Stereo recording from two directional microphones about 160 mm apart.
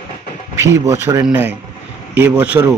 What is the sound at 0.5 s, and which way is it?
Speech, 15° right (ahead or behind).